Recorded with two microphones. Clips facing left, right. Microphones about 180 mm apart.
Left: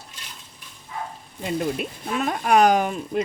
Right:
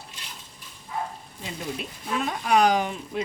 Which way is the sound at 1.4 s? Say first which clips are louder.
Left 8 dB; 55° left (ahead or behind).